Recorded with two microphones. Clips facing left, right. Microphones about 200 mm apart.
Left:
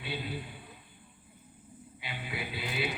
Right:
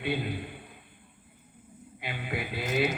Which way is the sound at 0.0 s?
55° right (ahead or behind).